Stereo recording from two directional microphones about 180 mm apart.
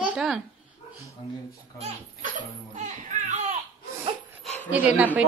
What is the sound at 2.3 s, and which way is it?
Speech, 40° right (ahead or behind).